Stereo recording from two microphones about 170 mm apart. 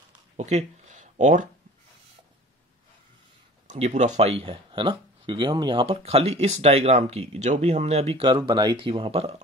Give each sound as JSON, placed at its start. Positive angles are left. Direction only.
{"t": 0.4, "sound": "speech", "side_deg": -40}
{"t": 3.6, "sound": "speech", "side_deg": -40}